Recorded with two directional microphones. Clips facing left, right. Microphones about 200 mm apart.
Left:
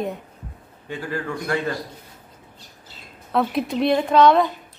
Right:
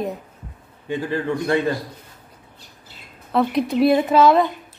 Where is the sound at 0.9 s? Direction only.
20° right (ahead or behind).